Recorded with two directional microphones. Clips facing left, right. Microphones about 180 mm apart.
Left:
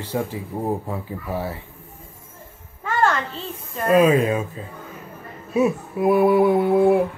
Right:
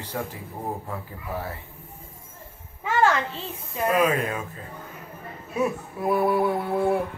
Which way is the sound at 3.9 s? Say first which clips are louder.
Left 8 dB; 25° left (ahead or behind).